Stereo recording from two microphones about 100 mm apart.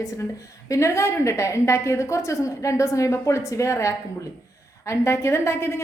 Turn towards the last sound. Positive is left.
turn(degrees=25)  # may be behind; listen again after turning